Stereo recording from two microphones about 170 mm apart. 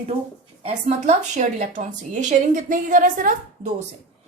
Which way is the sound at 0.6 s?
40° right (ahead or behind).